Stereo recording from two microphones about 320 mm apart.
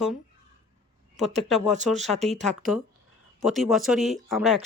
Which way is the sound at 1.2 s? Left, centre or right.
Centre.